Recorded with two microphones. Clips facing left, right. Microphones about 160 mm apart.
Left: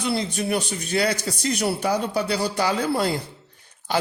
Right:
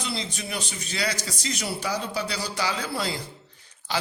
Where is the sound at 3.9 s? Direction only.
55° left (ahead or behind).